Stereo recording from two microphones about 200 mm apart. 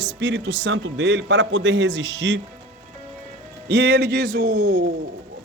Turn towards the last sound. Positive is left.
turn(degrees=-55)  # may be behind; listen again after turning